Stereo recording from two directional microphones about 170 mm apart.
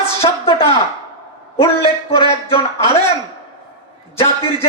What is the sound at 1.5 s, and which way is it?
A man's voice, 35° left (ahead or behind).